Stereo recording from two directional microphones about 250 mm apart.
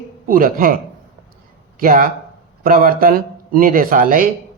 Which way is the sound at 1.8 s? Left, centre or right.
Right.